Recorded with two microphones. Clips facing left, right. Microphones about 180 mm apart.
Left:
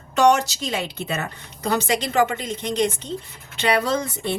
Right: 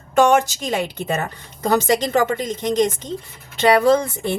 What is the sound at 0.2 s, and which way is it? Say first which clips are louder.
A woman's voice: right 2 dB; 50° right (ahead or behind).